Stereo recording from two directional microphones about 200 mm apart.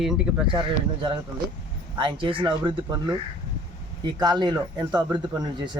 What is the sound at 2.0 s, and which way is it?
Speech, 25° right (ahead or behind).